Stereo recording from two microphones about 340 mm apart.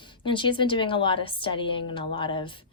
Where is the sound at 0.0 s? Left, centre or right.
Centre.